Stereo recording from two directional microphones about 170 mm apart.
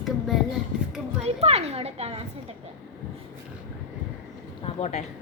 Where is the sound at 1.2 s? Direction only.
35° right (ahead or behind).